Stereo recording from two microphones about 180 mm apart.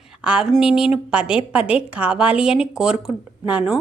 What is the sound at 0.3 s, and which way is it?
A woman's voice, 5° right (ahead or behind).